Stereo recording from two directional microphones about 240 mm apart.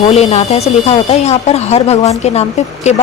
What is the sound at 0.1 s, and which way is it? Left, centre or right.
Speech, left.